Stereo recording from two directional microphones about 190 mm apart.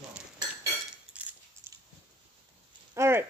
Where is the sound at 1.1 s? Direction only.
5° right (ahead or behind).